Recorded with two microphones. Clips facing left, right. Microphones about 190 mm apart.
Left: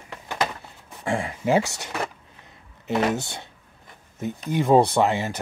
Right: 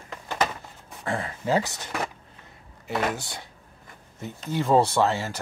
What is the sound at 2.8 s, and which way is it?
Speech, 25° left (ahead or behind).